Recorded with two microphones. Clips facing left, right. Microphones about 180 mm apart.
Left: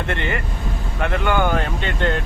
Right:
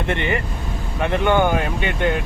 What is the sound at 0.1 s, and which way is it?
Speech, 20° right (ahead or behind).